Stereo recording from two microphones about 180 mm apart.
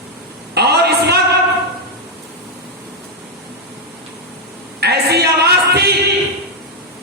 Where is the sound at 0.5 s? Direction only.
65° right (ahead or behind).